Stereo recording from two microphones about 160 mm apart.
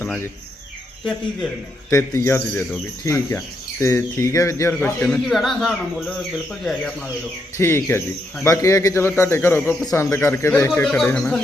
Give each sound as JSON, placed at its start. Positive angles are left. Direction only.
{"t": 0.0, "sound": "speech", "side_deg": 15}
{"t": 1.9, "sound": "speech", "side_deg": 15}
{"t": 4.7, "sound": "speech", "side_deg": 10}
{"t": 7.5, "sound": "speech", "side_deg": 15}
{"t": 10.8, "sound": "speech", "side_deg": 5}